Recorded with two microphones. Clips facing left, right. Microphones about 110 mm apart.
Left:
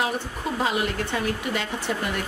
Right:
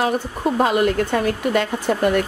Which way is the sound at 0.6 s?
50° right (ahead or behind).